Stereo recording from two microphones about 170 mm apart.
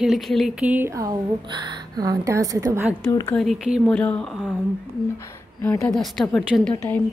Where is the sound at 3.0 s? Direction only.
15° left (ahead or behind).